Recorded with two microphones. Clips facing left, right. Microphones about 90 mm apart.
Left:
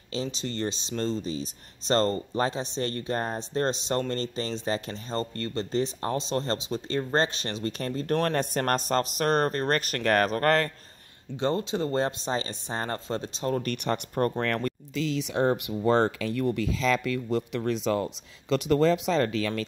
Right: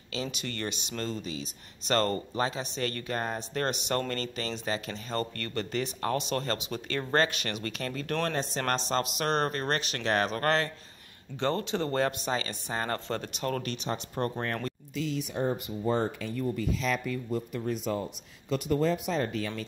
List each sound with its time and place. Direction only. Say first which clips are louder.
0.1 s speech: left 3 dB; 30° left (ahead or behind)
5.1 s speech: left 2 dB; 25° left (ahead or behind)
8.2 s speech: left 2 dB; 55° left (ahead or behind)
11.3 s speech: left 2 dB; 20° left (ahead or behind)
12.3 s speech: left 2 dB; 30° left (ahead or behind)
13.6 s speech: left 5 dB; 55° left (ahead or behind); by 19.6 s 90° left